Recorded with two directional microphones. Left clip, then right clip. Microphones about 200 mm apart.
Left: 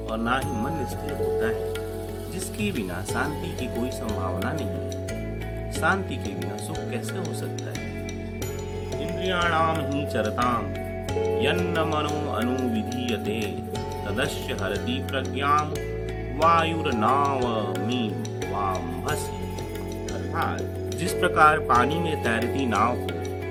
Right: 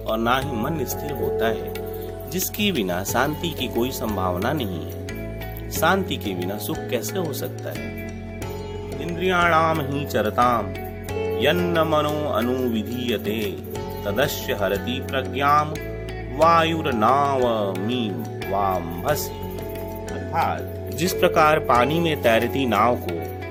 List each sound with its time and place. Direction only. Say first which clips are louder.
0.1 s speech: right 5 dB; 35° right (ahead or behind)
2.6 s speech: right 7 dB; 40° right (ahead or behind)
5.8 s speech: right 4 dB; 40° right (ahead or behind)
9.2 s speech: right 5 dB; 30° right (ahead or behind)
18.6 s music: right 5 dB; 30° right (ahead or behind)
20.3 s speech: right 6 dB; 20° right (ahead or behind)